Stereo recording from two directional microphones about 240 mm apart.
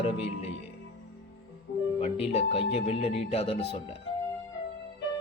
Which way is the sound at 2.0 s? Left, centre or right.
Left.